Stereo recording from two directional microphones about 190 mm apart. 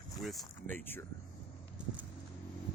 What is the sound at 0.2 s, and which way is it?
Speech, centre (ahead or behind).